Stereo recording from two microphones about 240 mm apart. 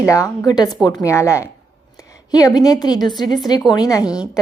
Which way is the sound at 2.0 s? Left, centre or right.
Centre.